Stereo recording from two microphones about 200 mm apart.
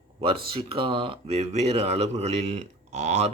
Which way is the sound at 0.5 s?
25° right (ahead or behind).